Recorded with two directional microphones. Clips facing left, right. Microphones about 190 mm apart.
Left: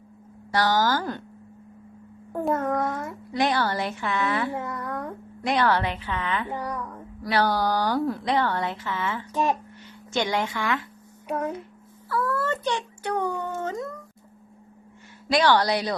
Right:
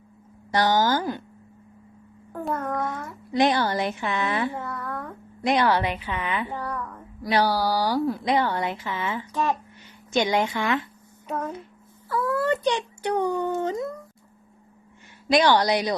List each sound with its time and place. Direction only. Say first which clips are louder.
0.5 s a woman's voice: right 1 dB; 20° right (ahead or behind)
2.5 s a sound: left 3 dB; 25° left (ahead or behind)
3.3 s a woman's voice: right 3 dB; 20° right (ahead or behind)
4.5 s a sound: left 2 dB; 20° left (ahead or behind)
5.4 s speech: right 1 dB; 15° right (ahead or behind)
6.5 s a child's voice: left 1 dB; 15° left (ahead or behind)
7.2 s speech: right 1 dB; 15° right (ahead or behind)
8.3 s speech: right 1 dB; 15° right (ahead or behind)
9.3 s a child's voice: left 1 dB; 15° left (ahead or behind)
9.8 s a woman's voice: right 3 dB; 15° right (ahead or behind)
12.0 s speech: right 2 dB; 15° right (ahead or behind)
15.3 s speech: right 1 dB; 15° right (ahead or behind)